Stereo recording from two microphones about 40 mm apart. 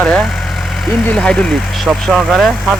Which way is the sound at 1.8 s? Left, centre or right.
Centre.